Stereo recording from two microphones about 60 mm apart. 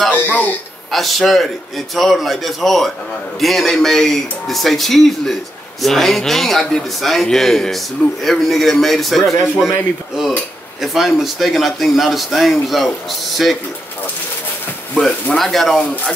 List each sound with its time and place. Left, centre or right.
0.1 s speech: left
0.9 s speech: centre
10.8 s speech: centre
15.0 s speech: centre